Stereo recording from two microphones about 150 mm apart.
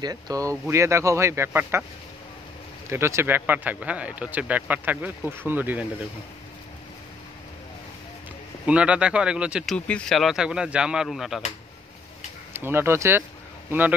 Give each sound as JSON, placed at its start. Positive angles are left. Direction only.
{"t": 0.0, "sound": "speech", "side_deg": -25}
{"t": 2.9, "sound": "speech", "side_deg": -20}
{"t": 8.6, "sound": "speech", "side_deg": -5}
{"t": 9.8, "sound": "speech", "side_deg": 5}
{"t": 12.5, "sound": "a man's voice", "side_deg": -15}